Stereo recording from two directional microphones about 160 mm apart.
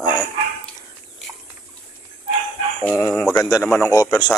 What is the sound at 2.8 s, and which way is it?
Speech, 10° left (ahead or behind).